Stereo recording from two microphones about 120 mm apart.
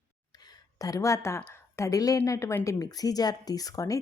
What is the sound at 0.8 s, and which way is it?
Speech, 25° left (ahead or behind).